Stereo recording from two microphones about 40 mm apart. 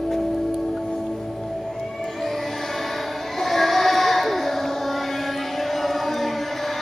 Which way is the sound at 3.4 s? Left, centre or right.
Centre.